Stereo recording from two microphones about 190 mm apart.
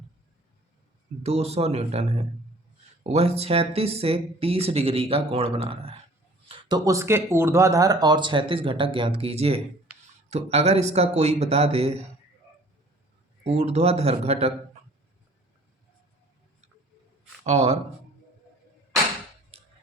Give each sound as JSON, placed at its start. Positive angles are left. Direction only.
{"t": 1.2, "sound": "speech", "side_deg": -35}
{"t": 13.4, "sound": "speech", "side_deg": -35}
{"t": 17.4, "sound": "speech", "side_deg": -35}